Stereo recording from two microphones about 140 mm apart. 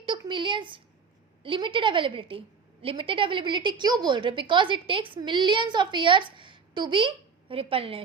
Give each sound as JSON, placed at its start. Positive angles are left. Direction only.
{"t": 0.0, "sound": "a woman's voice", "side_deg": -35}